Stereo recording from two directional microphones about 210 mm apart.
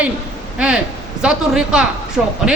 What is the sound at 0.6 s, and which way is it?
A man's voice, 5° right (ahead or behind).